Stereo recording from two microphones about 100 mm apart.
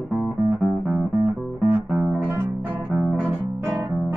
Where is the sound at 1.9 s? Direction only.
20° right (ahead or behind).